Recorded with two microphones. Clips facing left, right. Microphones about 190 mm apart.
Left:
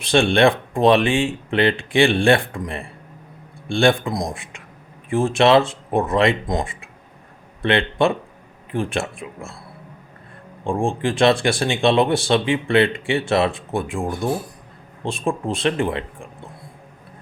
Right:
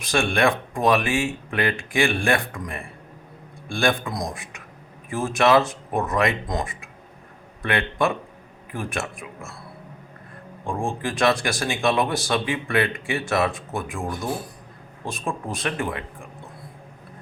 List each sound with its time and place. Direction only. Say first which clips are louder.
0.1 s speech: left 6 dB; 30° left (ahead or behind)
10.6 s speech: left 6 dB; 30° left (ahead or behind)